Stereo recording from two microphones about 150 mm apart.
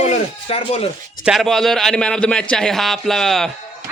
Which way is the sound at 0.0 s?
45° left (ahead or behind).